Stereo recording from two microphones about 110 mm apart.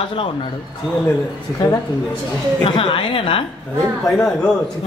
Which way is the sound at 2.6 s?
50° left (ahead or behind).